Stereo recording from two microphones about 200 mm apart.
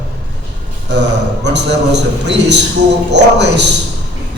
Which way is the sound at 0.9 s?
60° right (ahead or behind).